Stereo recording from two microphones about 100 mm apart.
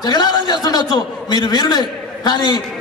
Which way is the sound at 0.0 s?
45° left (ahead or behind).